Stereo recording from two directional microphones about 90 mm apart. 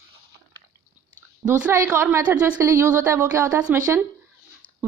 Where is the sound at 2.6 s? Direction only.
30° right (ahead or behind).